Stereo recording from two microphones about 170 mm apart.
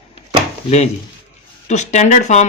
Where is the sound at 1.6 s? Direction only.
45° left (ahead or behind).